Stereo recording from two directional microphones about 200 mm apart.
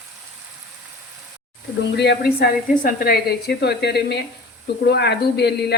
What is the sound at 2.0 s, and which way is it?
Speech, 55° left (ahead or behind).